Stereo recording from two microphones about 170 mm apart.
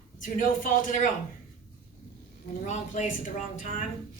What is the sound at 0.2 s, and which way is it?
Speech, 50° left (ahead or behind).